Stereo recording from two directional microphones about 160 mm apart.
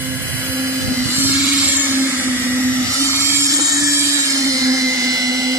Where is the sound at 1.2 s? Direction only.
10° right (ahead or behind).